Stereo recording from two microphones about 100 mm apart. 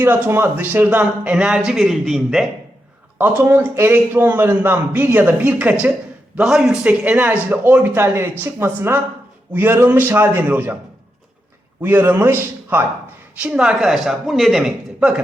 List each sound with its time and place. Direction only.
0.0 s a man's voice: 25° right (ahead or behind); by 2.5 s centre (ahead or behind)
3.2 s a man's voice: 20° right (ahead or behind)
11.8 s a man's voice: 20° right (ahead or behind)
13.3 s a man's voice: 10° right (ahead or behind)